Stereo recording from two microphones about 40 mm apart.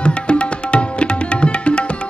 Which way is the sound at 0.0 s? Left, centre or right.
Left.